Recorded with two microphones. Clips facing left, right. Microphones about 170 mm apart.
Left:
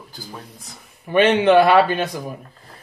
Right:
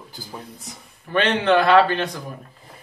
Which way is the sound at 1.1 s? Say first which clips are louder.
Left 5 dB; 15° left (ahead or behind).